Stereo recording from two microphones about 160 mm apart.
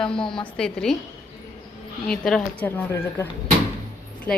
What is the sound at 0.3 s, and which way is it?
Speech, 5° left (ahead or behind).